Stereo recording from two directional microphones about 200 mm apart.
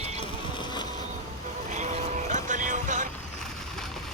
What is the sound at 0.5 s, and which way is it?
Vehicle, 20° left (ahead or behind).